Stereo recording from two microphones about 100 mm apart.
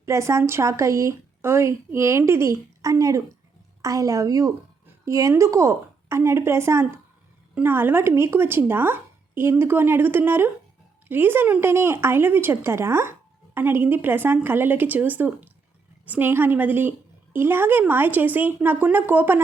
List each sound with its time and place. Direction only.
0.0 s speech: 30° right (ahead or behind)